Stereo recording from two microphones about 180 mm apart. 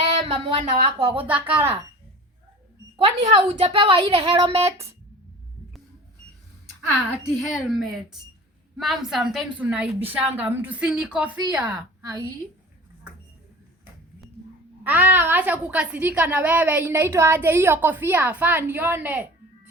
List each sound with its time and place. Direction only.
0.2 s a sound: 30° right (ahead or behind)
1.2 s a woman's voice: 10° right (ahead or behind)
3.0 s speech: 30° right (ahead or behind)
4.6 s a woman's voice: 15° right (ahead or behind)
7.3 s a woman's voice: centre (ahead or behind)
9.0 s a woman's voice: centre (ahead or behind)
14.8 s a woman's voice: 10° right (ahead or behind)